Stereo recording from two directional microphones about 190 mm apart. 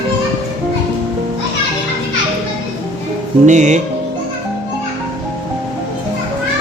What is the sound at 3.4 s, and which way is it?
Speech, 40° right (ahead or behind).